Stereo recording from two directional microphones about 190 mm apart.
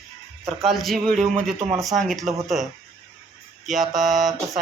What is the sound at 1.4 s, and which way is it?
Speech, 30° right (ahead or behind).